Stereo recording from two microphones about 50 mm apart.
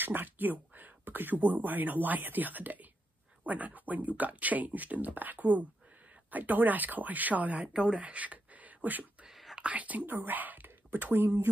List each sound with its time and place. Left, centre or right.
0.0 s speech: right
9.3 s whispering: centre
9.6 s speech: right